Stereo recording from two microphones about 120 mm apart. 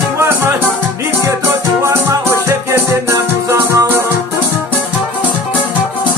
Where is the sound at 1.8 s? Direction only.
25° right (ahead or behind).